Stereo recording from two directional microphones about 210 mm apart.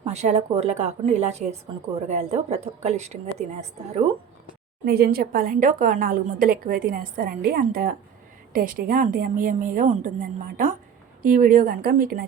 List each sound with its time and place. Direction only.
0.0 s a woman's voice: 30° right (ahead or behind)
4.9 s a woman's voice: 45° right (ahead or behind)